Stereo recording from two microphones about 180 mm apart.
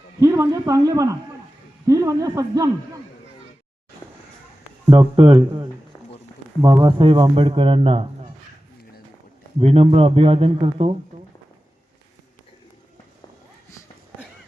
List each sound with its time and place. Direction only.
0.2 s speech: 15° right (ahead or behind)
5.1 s a man's voice: 30° right (ahead or behind)
6.6 s speech: 20° right (ahead or behind)
7.0 s a man's voice: 30° right (ahead or behind)
9.6 s a man's voice: 35° right (ahead or behind)